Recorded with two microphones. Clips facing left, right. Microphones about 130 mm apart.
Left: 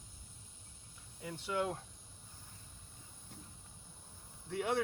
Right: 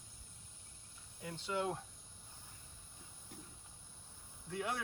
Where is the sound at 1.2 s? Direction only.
10° left (ahead or behind).